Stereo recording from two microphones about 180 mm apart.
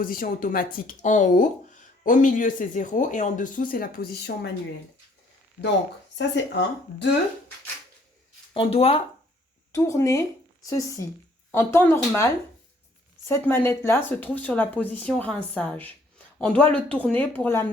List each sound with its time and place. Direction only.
0.0 s speech: 50° left (ahead or behind)
6.1 s speech: 75° left (ahead or behind)
8.5 s speech: 30° left (ahead or behind)
9.7 s speech: 15° left (ahead or behind)